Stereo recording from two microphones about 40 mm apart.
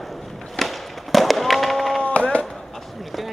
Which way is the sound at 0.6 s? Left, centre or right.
Centre.